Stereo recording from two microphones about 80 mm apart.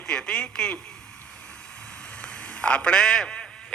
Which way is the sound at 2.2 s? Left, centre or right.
Centre.